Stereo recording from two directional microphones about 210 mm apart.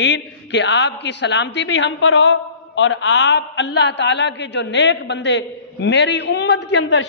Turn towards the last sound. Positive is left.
turn(degrees=55)  # may be behind; listen again after turning